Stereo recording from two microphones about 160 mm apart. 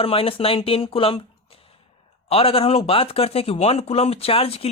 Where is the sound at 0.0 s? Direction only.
35° left (ahead or behind).